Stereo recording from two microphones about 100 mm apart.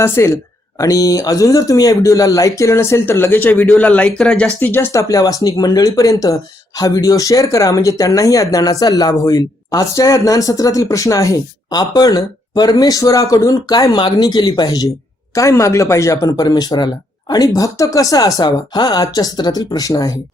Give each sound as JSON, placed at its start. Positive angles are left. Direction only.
{"t": 0.0, "sound": "speech", "side_deg": 25}